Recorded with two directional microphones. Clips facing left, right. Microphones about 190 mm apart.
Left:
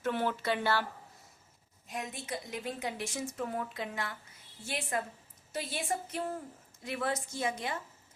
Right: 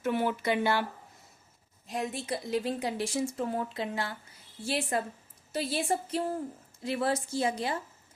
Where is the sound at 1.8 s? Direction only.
35° right (ahead or behind).